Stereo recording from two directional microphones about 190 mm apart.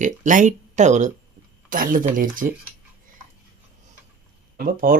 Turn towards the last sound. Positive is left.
turn(degrees=-50)  # may be behind; listen again after turning